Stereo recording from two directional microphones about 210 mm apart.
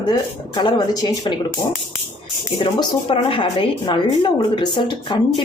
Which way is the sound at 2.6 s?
25° left (ahead or behind).